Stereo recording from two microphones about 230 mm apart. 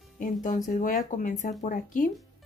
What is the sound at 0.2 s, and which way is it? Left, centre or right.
Speech, left.